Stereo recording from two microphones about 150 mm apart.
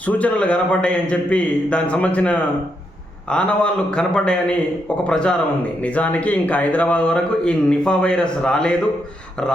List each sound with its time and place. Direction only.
0.0 s speech: 10° left (ahead or behind)